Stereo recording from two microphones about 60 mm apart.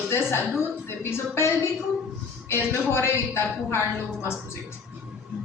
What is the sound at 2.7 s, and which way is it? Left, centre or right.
A woman's voice, left.